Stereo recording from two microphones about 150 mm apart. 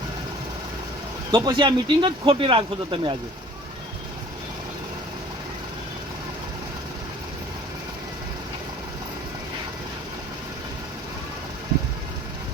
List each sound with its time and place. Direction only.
1.3 s speech: 25° right (ahead or behind)